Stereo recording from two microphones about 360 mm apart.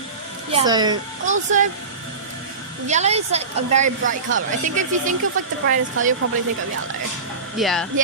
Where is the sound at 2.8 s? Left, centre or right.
Centre.